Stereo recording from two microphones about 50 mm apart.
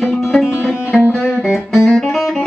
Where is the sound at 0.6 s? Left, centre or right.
Left.